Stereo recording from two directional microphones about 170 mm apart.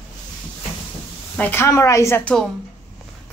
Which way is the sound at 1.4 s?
15° left (ahead or behind).